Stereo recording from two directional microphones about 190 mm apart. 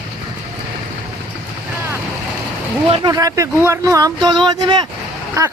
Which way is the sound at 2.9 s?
20° right (ahead or behind).